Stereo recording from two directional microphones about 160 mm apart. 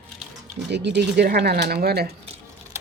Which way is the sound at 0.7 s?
90° right.